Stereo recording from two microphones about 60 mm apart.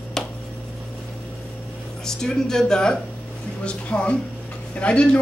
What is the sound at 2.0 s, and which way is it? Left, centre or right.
A woman's voice, centre.